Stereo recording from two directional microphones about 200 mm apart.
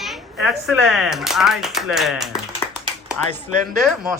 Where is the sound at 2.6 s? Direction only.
20° left (ahead or behind).